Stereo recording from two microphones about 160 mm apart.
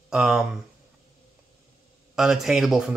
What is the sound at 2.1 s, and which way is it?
Speech, centre (ahead or behind).